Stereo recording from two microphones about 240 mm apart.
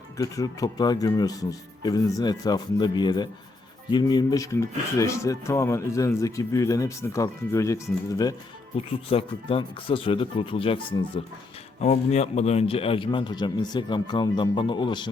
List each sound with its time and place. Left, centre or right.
0.2 s a man's voice: centre